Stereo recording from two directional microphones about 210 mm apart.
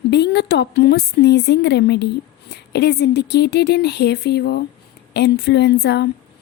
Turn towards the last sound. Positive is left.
turn(degrees=50)  # may be behind; listen again after turning